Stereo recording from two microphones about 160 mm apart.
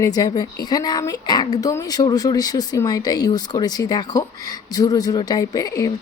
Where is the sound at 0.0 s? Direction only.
20° left (ahead or behind).